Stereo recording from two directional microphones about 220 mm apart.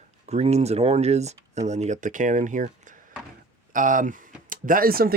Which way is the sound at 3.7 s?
35° right (ahead or behind).